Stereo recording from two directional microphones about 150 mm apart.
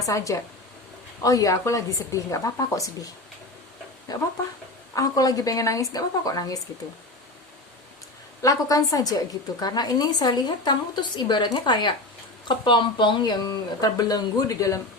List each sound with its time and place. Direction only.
0.0 s a woman's voice: 20° left (ahead or behind)
4.1 s a woman's voice: 25° left (ahead or behind)
8.4 s a woman's voice: 25° left (ahead or behind)